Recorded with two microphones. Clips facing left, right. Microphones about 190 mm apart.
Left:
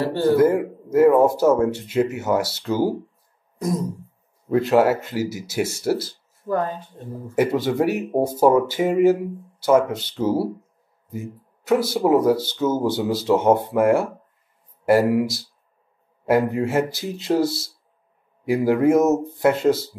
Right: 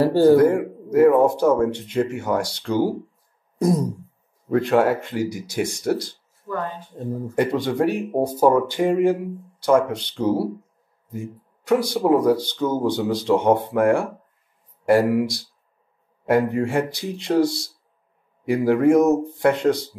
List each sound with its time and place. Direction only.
0.0 s speech: 40° right (ahead or behind)
0.4 s speech: 5° left (ahead or behind)
4.5 s speech: 5° left (ahead or behind)
6.5 s speech: 35° left (ahead or behind)
7.3 s speech: 5° left (ahead or behind)